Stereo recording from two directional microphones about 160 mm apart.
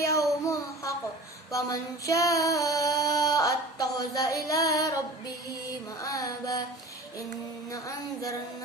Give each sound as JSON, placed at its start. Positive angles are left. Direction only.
{"t": 0.0, "sound": "a sound", "side_deg": 20}
{"t": 1.5, "sound": "child singing", "side_deg": 20}
{"t": 7.7, "sound": "child singing", "side_deg": 20}